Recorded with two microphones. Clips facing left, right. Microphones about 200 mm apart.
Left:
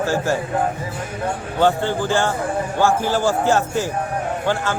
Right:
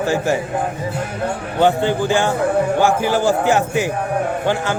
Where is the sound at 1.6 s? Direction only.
15° right (ahead or behind).